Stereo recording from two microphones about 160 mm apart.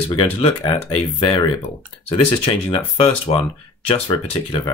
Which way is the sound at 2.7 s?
35° left (ahead or behind).